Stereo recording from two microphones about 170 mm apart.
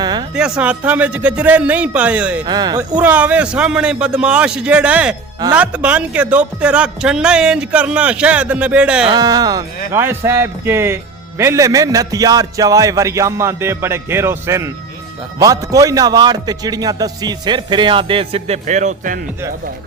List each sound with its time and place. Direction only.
0.0 s a sound: 25° right (ahead or behind)
0.3 s speech: 5° right (ahead or behind)
2.5 s a man's voice: 25° right (ahead or behind)
2.9 s speech: 10° right (ahead or behind)
9.0 s a man's voice: 25° right (ahead or behind); by 19.2 s 50° right (ahead or behind)